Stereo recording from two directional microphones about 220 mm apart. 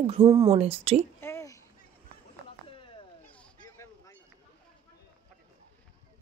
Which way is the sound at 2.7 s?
25° left (ahead or behind).